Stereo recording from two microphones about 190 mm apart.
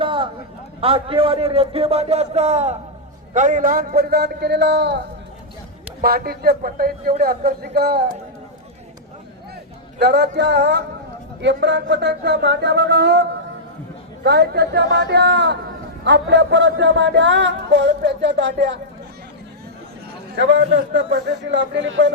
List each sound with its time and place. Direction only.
0.0 s a sound: 25° right (ahead or behind)
0.8 s a man's voice: 30° right (ahead or behind); by 8.1 s 55° right (ahead or behind)
10.0 s speech: 60° right (ahead or behind)
14.3 s speech: 60° right (ahead or behind)
16.0 s music: 65° right (ahead or behind)
20.3 s music: 65° right (ahead or behind)